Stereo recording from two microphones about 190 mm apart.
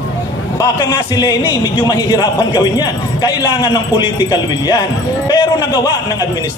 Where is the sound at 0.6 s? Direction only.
20° left (ahead or behind).